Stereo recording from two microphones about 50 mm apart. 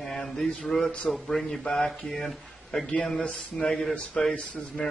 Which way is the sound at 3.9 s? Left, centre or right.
Centre.